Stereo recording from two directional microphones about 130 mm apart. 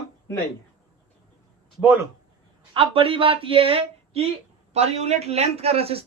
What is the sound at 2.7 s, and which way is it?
Speech, 45° right (ahead or behind).